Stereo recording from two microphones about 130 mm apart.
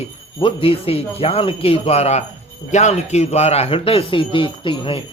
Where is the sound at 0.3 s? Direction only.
45° left (ahead or behind).